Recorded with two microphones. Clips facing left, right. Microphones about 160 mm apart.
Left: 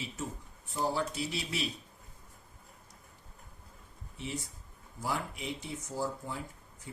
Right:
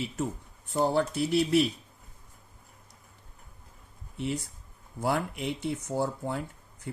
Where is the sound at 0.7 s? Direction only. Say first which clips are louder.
Right 7 dB; 60° right (ahead or behind).